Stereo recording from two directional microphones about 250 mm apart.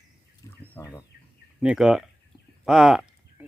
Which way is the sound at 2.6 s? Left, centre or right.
Centre.